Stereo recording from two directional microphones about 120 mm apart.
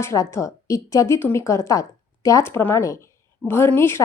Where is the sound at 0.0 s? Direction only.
25° left (ahead or behind).